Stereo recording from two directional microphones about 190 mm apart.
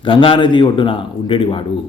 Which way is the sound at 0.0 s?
25° left (ahead or behind).